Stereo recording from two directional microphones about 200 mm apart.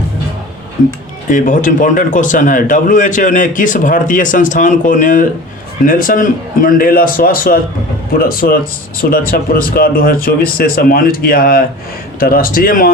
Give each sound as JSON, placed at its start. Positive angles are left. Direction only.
{"t": 1.3, "sound": "speech", "side_deg": 40}